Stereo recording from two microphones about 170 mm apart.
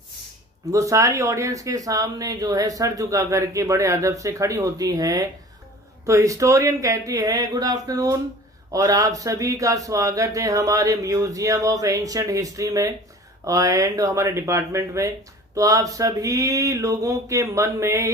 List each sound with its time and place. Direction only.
0.6 s speech: 20° right (ahead or behind)